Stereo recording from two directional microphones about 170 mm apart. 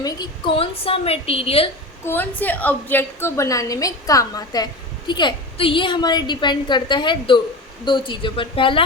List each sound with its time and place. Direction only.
0.0 s a woman's voice: 25° left (ahead or behind)
2.0 s a woman's voice: 10° left (ahead or behind); by 8.8 s 30° left (ahead or behind)